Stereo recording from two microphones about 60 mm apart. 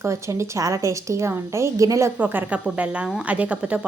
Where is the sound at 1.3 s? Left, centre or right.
Right.